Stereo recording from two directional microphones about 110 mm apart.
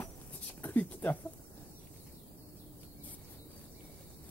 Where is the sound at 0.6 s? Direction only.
15° left (ahead or behind).